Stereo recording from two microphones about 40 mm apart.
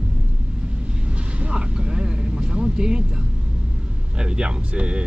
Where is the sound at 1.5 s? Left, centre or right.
Right.